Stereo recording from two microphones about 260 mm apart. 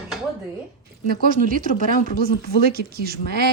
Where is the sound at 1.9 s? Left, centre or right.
Left.